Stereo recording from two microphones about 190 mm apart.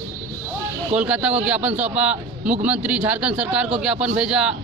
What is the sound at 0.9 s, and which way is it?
A man's voice, 5° right (ahead or behind).